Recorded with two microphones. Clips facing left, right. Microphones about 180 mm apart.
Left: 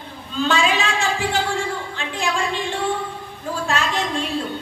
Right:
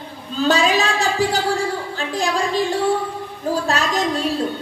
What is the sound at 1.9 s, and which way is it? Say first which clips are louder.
Speech: right 3 dB; 40° right (ahead or behind).